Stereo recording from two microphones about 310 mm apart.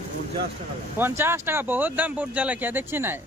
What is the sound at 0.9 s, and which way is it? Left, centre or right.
Speech, centre.